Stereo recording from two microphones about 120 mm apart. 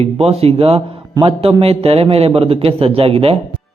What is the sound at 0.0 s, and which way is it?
A man's voice, 55° right (ahead or behind).